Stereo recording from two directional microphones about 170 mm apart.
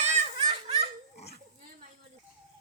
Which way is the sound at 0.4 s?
35° right (ahead or behind).